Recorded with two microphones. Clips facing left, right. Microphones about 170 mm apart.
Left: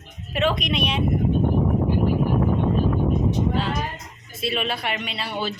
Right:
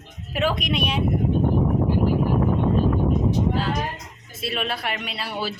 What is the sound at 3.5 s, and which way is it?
A woman's voice, centre (ahead or behind).